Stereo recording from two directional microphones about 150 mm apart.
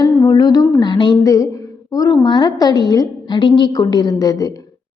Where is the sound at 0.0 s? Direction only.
25° left (ahead or behind).